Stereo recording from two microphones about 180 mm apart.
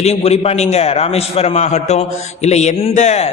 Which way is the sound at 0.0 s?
35° left (ahead or behind).